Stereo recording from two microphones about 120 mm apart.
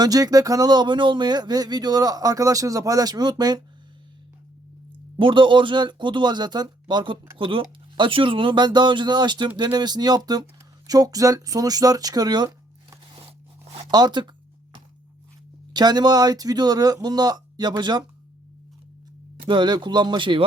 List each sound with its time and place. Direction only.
0.0 s speech: 30° right (ahead or behind)
5.2 s speech: 45° right (ahead or behind)
15.7 s speech: 35° right (ahead or behind)
19.5 s speech: 40° right (ahead or behind)